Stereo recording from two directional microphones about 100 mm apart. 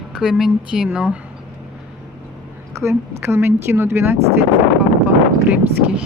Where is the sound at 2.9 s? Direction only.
25° right (ahead or behind).